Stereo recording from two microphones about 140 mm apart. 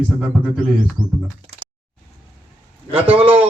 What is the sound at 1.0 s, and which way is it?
Speech, 20° right (ahead or behind).